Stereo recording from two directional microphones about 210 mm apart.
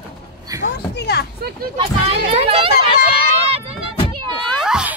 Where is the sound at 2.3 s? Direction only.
25° right (ahead or behind).